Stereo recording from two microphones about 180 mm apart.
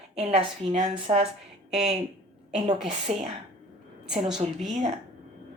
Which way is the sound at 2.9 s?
35° right (ahead or behind).